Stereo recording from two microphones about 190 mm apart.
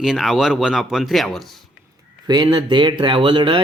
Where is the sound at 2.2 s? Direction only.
20° right (ahead or behind).